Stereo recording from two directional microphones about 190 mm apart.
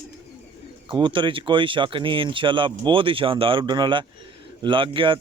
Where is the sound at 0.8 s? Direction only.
25° right (ahead or behind).